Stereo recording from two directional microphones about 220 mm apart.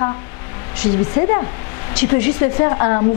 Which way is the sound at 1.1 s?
20° left (ahead or behind).